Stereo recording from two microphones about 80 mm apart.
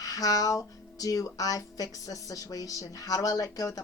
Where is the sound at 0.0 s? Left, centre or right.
Left.